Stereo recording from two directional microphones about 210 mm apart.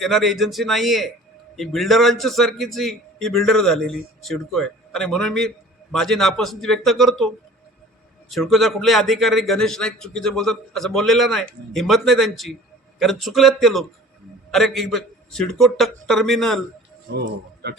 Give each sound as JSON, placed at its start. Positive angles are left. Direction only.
{"t": 0.0, "sound": "a man's voice", "side_deg": 0}
{"t": 8.3, "sound": "a man's voice", "side_deg": 0}
{"t": 17.2, "sound": "a man's voice", "side_deg": -50}